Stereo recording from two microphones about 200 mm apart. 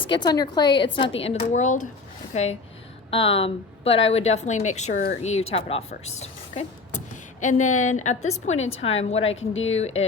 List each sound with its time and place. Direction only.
0.0 s a woman's voice: 20° left (ahead or behind)
6.2 s a sound: 30° left (ahead or behind)
7.4 s a woman's voice: 35° left (ahead or behind)
9.3 s speech: 80° left
9.6 s a woman's voice: 30° left (ahead or behind)